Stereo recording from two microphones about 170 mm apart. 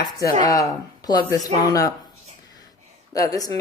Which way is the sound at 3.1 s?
20° left (ahead or behind).